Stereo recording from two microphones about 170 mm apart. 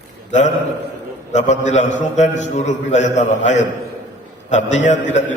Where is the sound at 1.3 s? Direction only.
45° left (ahead or behind).